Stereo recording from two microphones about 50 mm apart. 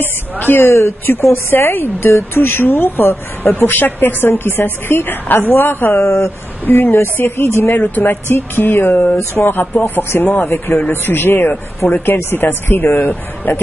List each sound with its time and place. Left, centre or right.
0.0 s a sound: left
0.7 s a woman's voice: left
6.0 s a woman's voice: left
7.7 s a woman's voice: left